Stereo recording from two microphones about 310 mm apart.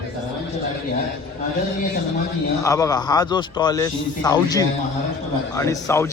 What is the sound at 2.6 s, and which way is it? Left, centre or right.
A man's voice, centre.